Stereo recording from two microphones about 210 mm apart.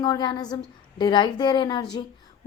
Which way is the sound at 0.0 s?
20° left (ahead or behind).